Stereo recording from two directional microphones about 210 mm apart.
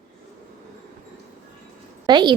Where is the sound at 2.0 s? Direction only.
20° right (ahead or behind).